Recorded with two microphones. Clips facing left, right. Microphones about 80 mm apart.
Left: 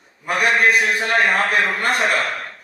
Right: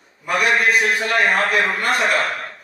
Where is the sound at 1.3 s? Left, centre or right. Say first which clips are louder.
Even; right.